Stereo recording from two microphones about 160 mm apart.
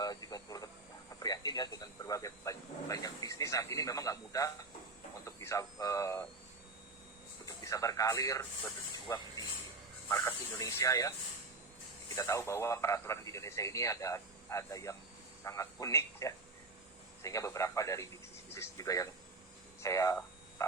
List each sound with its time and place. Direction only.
0.0 s a sound: 25° left (ahead or behind)
1.2 s speech: 25° left (ahead or behind)
7.4 s speech: 20° left (ahead or behind)
12.1 s speech: 20° left (ahead or behind)
20.6 s frog: 20° left (ahead or behind)